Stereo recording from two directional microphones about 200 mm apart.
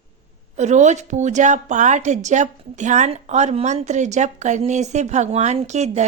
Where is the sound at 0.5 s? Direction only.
35° right (ahead or behind).